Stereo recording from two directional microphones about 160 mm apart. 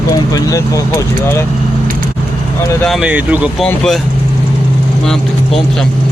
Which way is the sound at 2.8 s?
Centre (ahead or behind).